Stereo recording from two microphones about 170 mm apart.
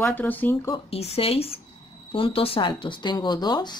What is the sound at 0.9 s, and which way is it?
Speech, 35° left (ahead or behind).